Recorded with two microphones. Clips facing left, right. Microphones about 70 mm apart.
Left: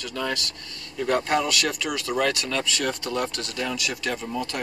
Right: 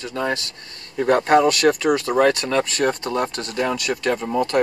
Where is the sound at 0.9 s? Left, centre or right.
Right.